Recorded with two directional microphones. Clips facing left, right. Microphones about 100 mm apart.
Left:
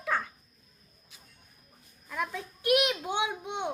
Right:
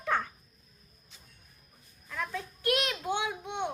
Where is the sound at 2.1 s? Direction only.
15° left (ahead or behind).